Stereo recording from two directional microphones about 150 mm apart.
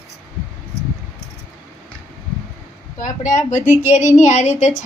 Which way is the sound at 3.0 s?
55° left (ahead or behind).